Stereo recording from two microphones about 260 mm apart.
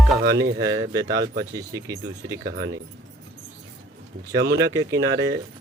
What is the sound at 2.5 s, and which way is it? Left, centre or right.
Speech, right.